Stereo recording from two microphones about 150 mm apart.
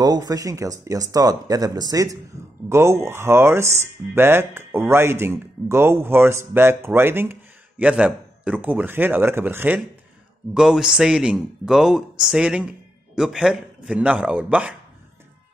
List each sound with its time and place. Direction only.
0.0 s speech: 25° right (ahead or behind)
10.5 s a man's voice: 5° right (ahead or behind)